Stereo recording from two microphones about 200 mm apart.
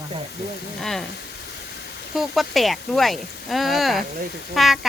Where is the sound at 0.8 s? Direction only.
Centre (ahead or behind).